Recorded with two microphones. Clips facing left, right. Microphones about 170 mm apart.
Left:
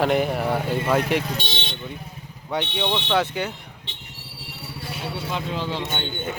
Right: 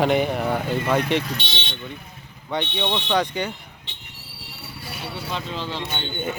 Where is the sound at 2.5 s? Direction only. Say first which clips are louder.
Even; 5° left (ahead or behind).